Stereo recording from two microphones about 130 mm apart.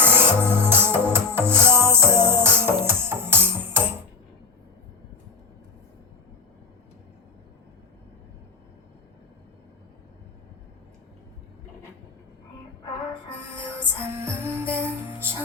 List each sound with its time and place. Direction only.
0.0 s music: 15° right (ahead or behind)
13.6 s music: 20° right (ahead or behind)